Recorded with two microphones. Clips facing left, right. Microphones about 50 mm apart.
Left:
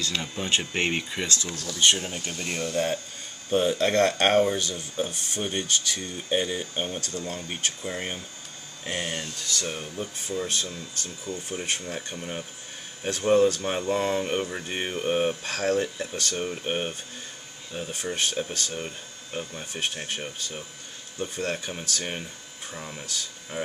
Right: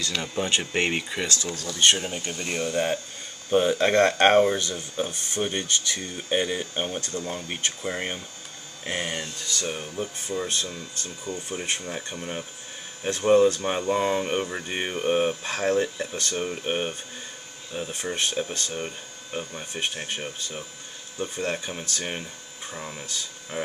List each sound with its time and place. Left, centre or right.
0.0 s speech: centre
3.7 s speech: right
4.7 s speech: centre
10.3 s speech: centre
11.3 s speech: centre
11.9 s speech: centre
15.4 s speech: centre
22.7 s speech: centre